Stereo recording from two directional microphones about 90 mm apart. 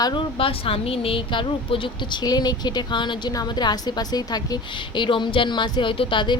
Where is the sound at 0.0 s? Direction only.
65° left (ahead or behind).